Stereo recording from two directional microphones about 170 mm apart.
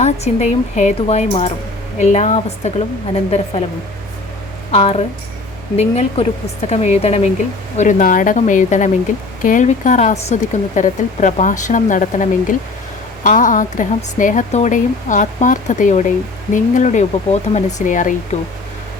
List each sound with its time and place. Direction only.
0.0 s speech: 45° left (ahead or behind)
4.7 s speech: 35° left (ahead or behind)